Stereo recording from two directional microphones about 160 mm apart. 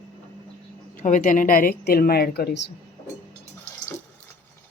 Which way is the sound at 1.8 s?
75° left (ahead or behind).